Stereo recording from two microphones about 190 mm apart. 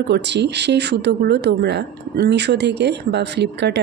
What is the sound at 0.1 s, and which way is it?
Speech, 65° right (ahead or behind).